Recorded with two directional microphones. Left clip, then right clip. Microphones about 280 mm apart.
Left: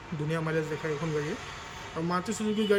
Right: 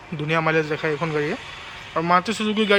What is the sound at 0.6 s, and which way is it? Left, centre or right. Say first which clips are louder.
Speech: right 9 dB; right.